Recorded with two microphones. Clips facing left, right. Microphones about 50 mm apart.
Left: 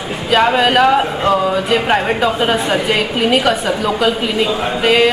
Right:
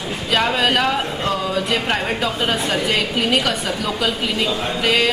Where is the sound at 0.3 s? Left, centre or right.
Centre.